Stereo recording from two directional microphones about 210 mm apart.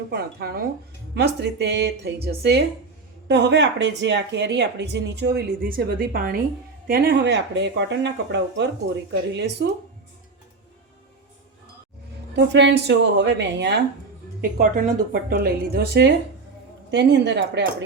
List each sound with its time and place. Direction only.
0.1 s speech: 50° right (ahead or behind)
12.4 s speech: 55° right (ahead or behind)
14.6 s speech: 40° right (ahead or behind); by 17.8 s 55° right (ahead or behind)